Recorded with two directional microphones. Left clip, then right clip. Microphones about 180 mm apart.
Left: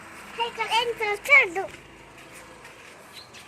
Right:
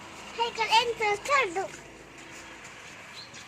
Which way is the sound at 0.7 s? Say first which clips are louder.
Right 1 dB; 5° left (ahead or behind).